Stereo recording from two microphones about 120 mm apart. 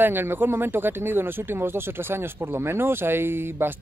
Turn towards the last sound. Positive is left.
turn(degrees=-20)  # may be behind; listen again after turning